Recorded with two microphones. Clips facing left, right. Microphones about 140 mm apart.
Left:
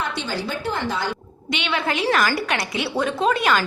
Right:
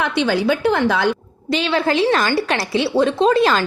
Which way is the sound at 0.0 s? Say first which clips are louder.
Right 9 dB; 65° right (ahead or behind).